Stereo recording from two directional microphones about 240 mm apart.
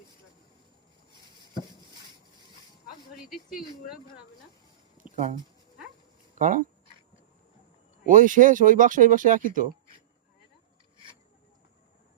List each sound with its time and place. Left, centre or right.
5.0 s a sound: centre
6.3 s speech: right
8.0 s speech: right